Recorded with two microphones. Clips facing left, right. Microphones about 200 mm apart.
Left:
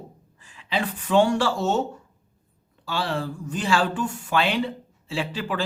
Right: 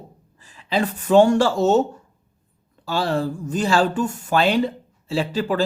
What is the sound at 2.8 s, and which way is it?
Speech, 40° right (ahead or behind).